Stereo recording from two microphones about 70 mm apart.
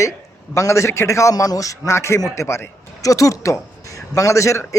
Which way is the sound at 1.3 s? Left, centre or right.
Left.